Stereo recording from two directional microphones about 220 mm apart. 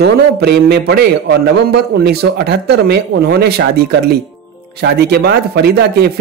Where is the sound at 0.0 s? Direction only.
45° right (ahead or behind).